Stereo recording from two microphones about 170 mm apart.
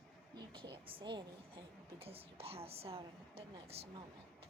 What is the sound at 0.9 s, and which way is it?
A woman's voice, 30° right (ahead or behind).